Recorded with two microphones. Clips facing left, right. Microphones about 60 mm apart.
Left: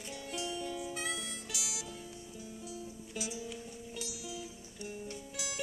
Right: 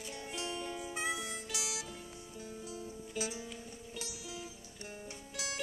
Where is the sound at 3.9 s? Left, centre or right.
Right.